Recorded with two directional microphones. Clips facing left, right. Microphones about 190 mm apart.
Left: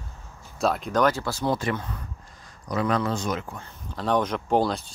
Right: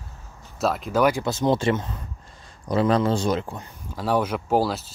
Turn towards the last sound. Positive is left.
turn(degrees=-5)  # may be behind; listen again after turning